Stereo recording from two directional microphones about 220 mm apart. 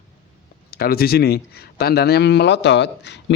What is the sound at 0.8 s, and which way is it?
Speech, 45° left (ahead or behind).